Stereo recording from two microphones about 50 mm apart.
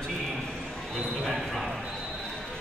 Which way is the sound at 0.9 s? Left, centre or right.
Centre.